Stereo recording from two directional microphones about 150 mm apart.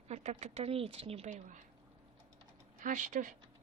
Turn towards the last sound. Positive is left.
turn(degrees=-55)  # may be behind; listen again after turning